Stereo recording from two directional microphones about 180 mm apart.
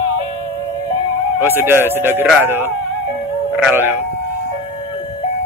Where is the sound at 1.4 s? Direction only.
10° right (ahead or behind).